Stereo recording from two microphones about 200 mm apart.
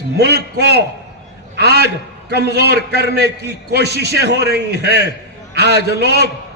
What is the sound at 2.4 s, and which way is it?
Speech, 60° left (ahead or behind).